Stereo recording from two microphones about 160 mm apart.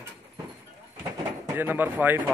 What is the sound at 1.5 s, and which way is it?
Speech, 10° right (ahead or behind).